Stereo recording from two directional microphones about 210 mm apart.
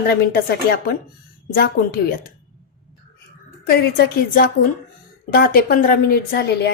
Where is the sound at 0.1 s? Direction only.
45° left (ahead or behind).